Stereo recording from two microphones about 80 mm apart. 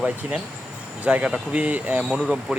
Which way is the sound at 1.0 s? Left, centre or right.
Centre.